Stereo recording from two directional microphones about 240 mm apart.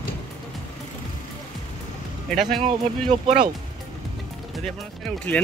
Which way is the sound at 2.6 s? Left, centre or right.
Right.